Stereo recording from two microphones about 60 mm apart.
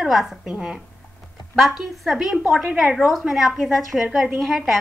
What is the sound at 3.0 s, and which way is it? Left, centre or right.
A woman's voice, centre.